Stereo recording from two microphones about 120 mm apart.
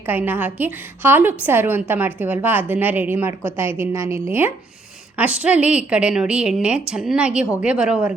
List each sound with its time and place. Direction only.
0.0 s a woman's voice: 15° right (ahead or behind)